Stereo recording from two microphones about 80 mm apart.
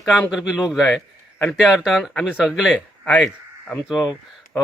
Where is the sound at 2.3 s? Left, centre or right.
Centre.